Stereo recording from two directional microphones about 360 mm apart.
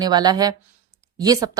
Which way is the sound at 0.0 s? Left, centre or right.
Centre.